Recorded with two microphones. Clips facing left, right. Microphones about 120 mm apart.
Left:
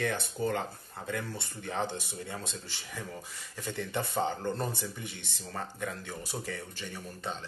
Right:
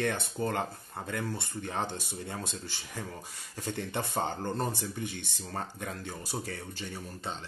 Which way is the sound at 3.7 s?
50° right (ahead or behind).